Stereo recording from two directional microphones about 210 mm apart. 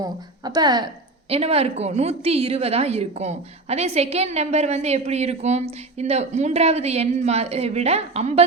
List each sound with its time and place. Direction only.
0.0 s a woman's voice: 20° right (ahead or behind)